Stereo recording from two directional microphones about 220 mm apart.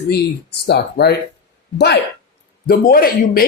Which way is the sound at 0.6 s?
50° left (ahead or behind).